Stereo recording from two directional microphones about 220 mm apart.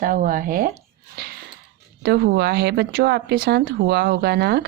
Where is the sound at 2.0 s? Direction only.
45° right (ahead or behind).